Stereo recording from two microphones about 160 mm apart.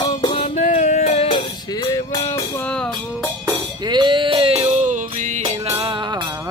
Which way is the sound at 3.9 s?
30° right (ahead or behind).